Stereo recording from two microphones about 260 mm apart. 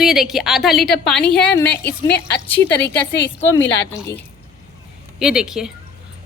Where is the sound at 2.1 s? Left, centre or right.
Left.